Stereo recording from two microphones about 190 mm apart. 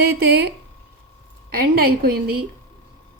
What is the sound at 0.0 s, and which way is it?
A woman's voice, 60° right (ahead or behind).